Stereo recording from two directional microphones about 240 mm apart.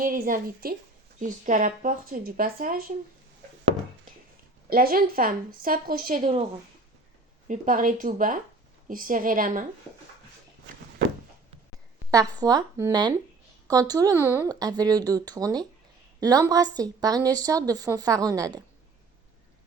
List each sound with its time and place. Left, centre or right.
0.0 s a woman's voice: right
4.7 s a woman's voice: right
7.4 s a woman's voice: right
12.1 s a woman's voice: centre